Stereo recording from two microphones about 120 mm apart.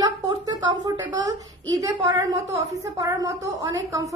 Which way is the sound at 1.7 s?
30° right (ahead or behind).